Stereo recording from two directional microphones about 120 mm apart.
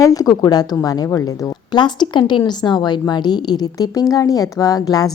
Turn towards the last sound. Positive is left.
turn(degrees=30)  # may be behind; listen again after turning